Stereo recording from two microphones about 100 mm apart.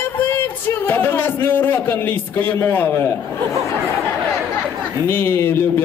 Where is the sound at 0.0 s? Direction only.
20° left (ahead or behind).